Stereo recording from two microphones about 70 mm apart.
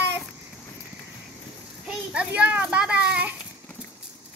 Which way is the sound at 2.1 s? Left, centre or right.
Centre.